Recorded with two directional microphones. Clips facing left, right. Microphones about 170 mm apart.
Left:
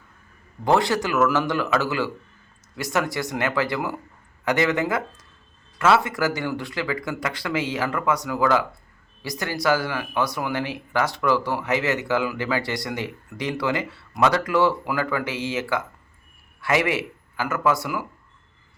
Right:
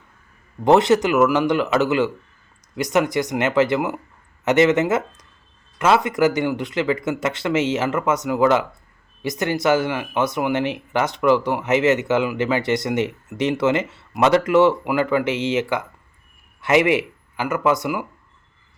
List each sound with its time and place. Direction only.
0.6 s speech: 20° right (ahead or behind)